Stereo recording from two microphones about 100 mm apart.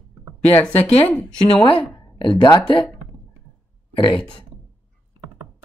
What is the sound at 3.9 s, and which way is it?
Speech, 60° left (ahead or behind).